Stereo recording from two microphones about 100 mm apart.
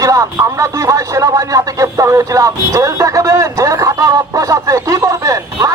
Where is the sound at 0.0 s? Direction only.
30° right (ahead or behind).